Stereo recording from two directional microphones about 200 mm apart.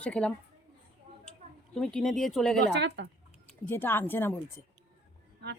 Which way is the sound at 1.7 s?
5° left (ahead or behind).